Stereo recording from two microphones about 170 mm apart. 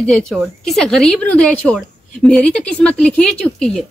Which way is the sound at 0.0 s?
Centre (ahead or behind).